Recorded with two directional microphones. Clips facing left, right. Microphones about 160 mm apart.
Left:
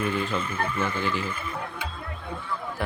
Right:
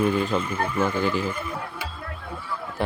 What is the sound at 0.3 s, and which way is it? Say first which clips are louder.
Speech: right 4 dB; 10° right (ahead or behind).